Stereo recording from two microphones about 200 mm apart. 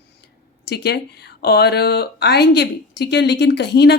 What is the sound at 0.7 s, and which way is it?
Speech, 55° left (ahead or behind).